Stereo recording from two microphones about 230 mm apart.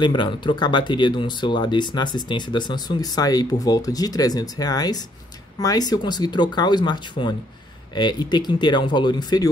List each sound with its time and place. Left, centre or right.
0.0 s speech: centre